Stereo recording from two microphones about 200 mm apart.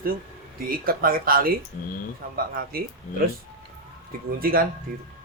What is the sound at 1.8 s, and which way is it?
Speech, 45° left (ahead or behind).